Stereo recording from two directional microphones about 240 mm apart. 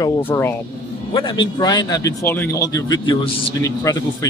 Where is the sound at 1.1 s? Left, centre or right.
Centre.